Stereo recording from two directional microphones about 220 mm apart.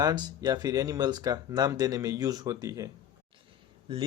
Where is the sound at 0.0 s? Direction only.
20° right (ahead or behind).